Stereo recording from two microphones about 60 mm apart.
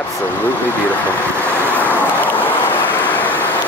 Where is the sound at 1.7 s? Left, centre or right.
Left.